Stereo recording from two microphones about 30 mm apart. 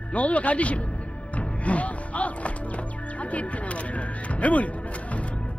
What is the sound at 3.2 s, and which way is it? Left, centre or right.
Speech, left.